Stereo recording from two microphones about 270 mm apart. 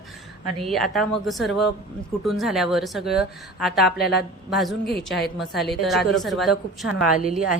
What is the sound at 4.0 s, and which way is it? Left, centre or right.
Speech, left.